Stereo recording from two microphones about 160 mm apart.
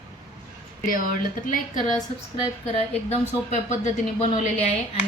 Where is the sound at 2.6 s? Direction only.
40° left (ahead or behind).